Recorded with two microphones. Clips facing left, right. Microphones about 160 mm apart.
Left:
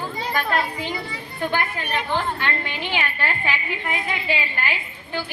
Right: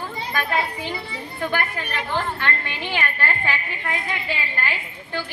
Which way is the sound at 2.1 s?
15° left (ahead or behind).